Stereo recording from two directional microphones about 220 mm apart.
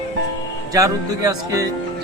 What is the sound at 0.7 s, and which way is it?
Speech, 15° right (ahead or behind).